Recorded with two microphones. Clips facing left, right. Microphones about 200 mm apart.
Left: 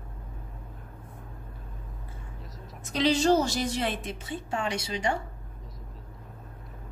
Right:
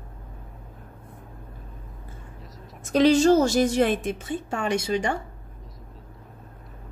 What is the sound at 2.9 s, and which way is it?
Speech, 45° right (ahead or behind).